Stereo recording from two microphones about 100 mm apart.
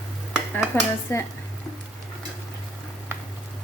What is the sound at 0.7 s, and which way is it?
Dishes, 25° left (ahead or behind).